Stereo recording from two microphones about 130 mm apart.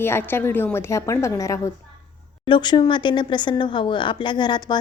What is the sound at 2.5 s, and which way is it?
Speech, 35° left (ahead or behind).